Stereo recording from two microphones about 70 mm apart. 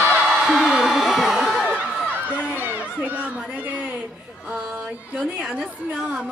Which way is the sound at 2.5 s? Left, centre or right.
Right.